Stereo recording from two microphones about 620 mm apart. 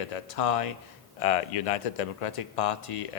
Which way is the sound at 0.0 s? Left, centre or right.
Left.